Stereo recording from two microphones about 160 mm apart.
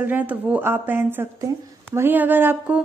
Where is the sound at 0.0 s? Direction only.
10° right (ahead or behind).